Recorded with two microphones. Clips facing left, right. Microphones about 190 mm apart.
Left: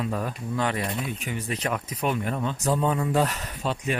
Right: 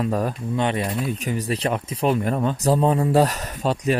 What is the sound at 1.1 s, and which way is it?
Speech, 40° right (ahead or behind).